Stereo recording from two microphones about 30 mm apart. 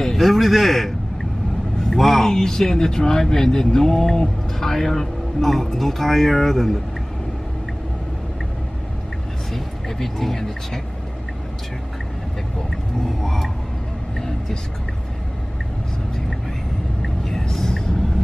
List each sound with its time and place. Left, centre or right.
0.2 s speech: centre
2.0 s speech: centre
2.2 s a man's voice: centre
9.5 s speech: centre
13.0 s a sound: centre
17.0 s vehicle: centre